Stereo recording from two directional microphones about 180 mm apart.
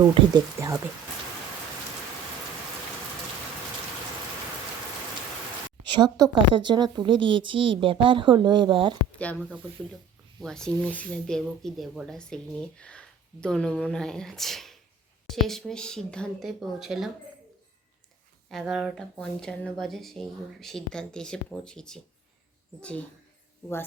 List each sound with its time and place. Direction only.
0.0 s a woman's voice: 20° right (ahead or behind)
5.9 s a woman's voice: 20° right (ahead or behind)
9.1 s speech: 10° left (ahead or behind)
18.5 s speech: centre (ahead or behind)